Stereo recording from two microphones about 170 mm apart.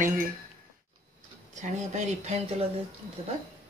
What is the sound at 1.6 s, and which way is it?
Speech, 45° right (ahead or behind).